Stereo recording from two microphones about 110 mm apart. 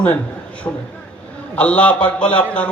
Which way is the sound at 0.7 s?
20° left (ahead or behind).